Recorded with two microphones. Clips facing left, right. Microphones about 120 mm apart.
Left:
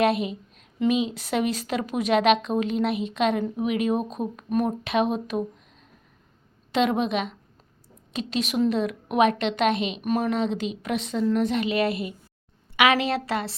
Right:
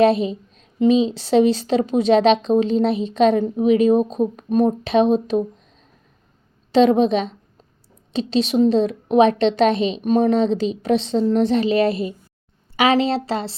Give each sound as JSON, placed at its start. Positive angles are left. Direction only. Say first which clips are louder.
{"t": 0.0, "sound": "a woman's voice", "louder": "right 7 dB", "side_deg": -30}
{"t": 6.7, "sound": "a woman's voice", "louder": "right 9 dB", "side_deg": -30}